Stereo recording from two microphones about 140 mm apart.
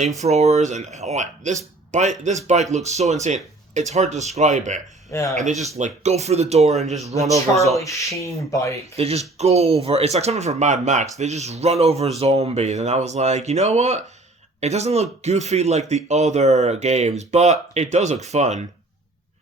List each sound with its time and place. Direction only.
0.2 s speech: 50° right (ahead or behind)
7.8 s speech: 20° left (ahead or behind)
9.0 s speech: 45° right (ahead or behind)